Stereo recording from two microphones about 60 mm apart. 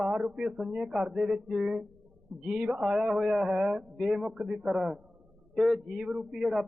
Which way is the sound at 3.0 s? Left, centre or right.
Centre.